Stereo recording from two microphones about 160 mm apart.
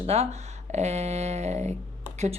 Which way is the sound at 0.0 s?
40° right (ahead or behind).